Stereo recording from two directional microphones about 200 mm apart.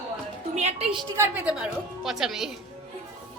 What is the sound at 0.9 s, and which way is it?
Speech, 10° right (ahead or behind).